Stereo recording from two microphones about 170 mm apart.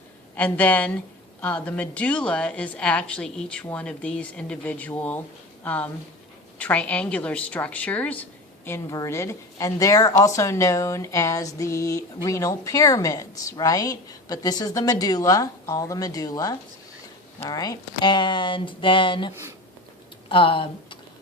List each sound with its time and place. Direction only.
0.3 s a woman's voice: 10° left (ahead or behind); by 21.0 s 30° left (ahead or behind)